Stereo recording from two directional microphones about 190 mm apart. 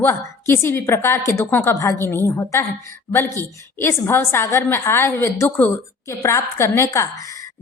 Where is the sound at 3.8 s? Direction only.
10° left (ahead or behind).